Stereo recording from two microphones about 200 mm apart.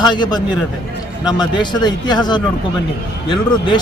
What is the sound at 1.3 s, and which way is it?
A man's voice, 20° left (ahead or behind).